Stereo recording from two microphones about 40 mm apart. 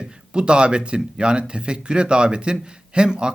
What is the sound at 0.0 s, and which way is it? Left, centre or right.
Speech, right.